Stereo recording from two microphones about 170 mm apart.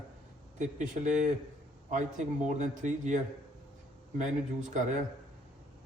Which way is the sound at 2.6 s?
45° right (ahead or behind).